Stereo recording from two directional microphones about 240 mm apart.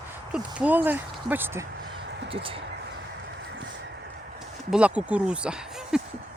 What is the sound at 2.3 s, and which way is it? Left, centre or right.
Speech, right.